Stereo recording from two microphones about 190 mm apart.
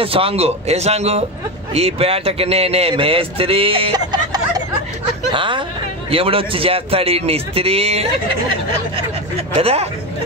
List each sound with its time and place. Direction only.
0.0 s a man's voice: 30° right (ahead or behind)